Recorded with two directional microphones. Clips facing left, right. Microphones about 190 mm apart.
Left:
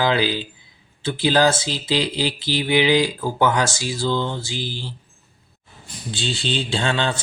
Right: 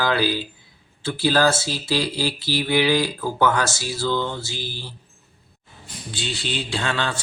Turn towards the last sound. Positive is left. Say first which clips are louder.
# left 3 dB
turn(degrees=25)  # may be behind; listen again after turning